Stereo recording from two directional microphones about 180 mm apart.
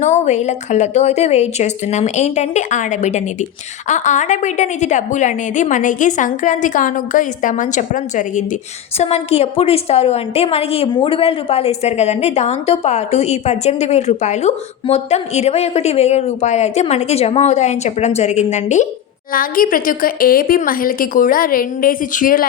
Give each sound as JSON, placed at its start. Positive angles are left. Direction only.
{"t": 0.0, "sound": "a woman's voice", "side_deg": 40}
{"t": 19.3, "sound": "a woman's voice", "side_deg": 50}